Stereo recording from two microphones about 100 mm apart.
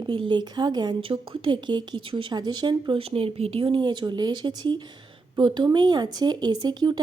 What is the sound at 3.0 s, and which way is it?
Speech, 75° right (ahead or behind).